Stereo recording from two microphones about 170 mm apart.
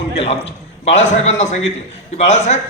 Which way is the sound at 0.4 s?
90° left.